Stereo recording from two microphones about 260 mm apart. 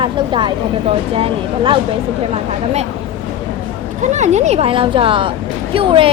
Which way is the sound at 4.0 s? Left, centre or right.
Right.